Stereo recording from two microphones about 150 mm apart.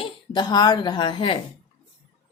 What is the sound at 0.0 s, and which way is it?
Speech, 30° left (ahead or behind).